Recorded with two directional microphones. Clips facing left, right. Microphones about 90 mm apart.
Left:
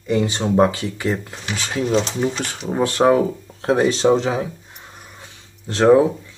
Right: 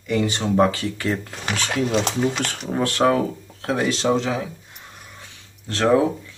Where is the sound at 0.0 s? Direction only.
25° left (ahead or behind).